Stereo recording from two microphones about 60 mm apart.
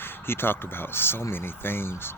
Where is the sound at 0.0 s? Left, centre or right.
Left.